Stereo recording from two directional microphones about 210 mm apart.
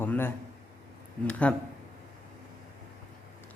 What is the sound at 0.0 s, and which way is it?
A man's voice, 10° left (ahead or behind).